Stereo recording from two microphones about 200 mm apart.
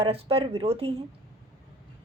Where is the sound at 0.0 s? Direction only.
30° right (ahead or behind).